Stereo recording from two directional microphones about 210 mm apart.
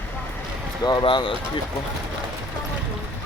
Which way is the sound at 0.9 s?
20° left (ahead or behind).